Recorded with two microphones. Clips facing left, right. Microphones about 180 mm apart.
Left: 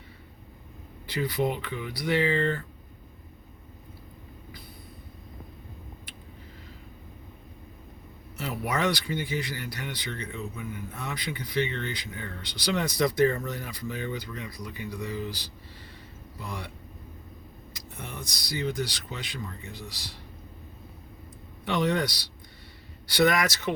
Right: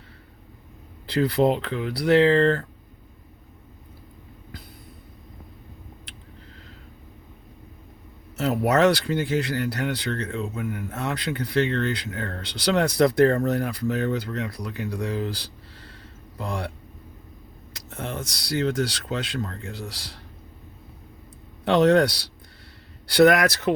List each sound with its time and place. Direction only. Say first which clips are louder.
1.1 s speech: right 7 dB; 75° right (ahead or behind)
8.4 s speech: right 9 dB; 75° right (ahead or behind)
16.4 s speech: right 8 dB; 80° right
17.7 s speech: right 8 dB; 90° right
21.6 s a man's voice: right 9 dB; 80° right
23.1 s speech: right 7 dB; 60° right (ahead or behind)